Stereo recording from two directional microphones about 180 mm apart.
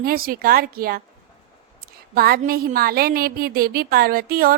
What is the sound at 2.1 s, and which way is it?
A woman's voice, 60° right (ahead or behind).